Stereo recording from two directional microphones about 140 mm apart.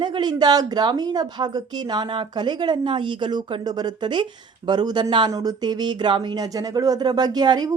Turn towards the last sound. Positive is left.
turn(degrees=-30)  # may be behind; listen again after turning